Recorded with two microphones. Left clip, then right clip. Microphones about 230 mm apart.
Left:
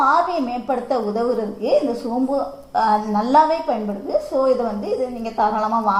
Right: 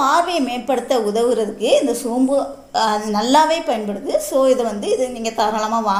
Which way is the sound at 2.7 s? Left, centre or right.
Right.